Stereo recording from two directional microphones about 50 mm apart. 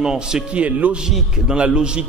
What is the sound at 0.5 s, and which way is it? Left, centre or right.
Speech, right.